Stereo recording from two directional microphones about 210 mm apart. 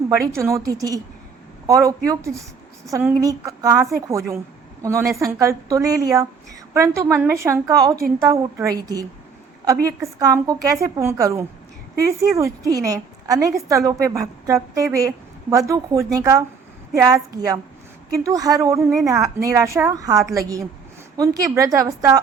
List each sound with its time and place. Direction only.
0.3 s a woman's voice: 15° right (ahead or behind)